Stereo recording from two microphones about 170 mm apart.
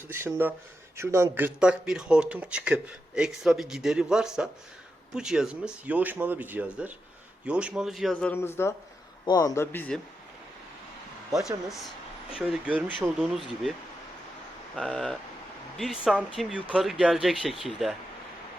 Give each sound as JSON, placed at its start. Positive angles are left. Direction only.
{"t": 0.1, "sound": "a man's voice", "side_deg": -15}
{"t": 12.3, "sound": "a man's voice", "side_deg": -5}
{"t": 14.8, "sound": "a man's voice", "side_deg": 5}